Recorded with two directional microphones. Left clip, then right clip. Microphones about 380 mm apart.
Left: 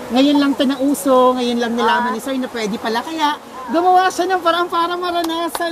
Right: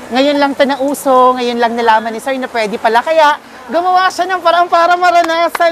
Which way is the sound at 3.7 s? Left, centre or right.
Right.